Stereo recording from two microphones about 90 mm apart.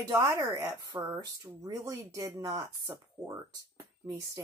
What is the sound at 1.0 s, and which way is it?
A woman's voice, 50° right (ahead or behind).